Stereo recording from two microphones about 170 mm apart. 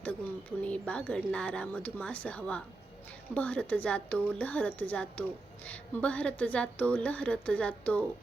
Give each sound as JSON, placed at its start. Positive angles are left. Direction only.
{"t": 0.6, "sound": "a woman's voice", "side_deg": 5}